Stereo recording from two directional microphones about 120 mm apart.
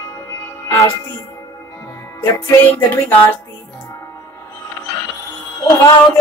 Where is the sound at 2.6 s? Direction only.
15° left (ahead or behind).